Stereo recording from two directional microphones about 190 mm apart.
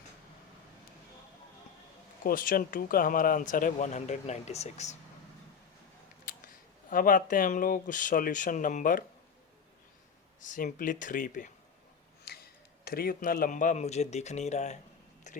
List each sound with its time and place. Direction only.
2.2 s speech: 45° left (ahead or behind)
6.9 s speech: 45° left (ahead or behind)
10.4 s speech: 45° left (ahead or behind)
12.2 s speech: 55° left (ahead or behind); by 14.8 s 35° left (ahead or behind)
15.3 s a sound: 40° left (ahead or behind)